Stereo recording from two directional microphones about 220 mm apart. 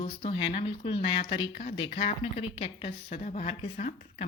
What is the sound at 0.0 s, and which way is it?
Speech, 25° left (ahead or behind).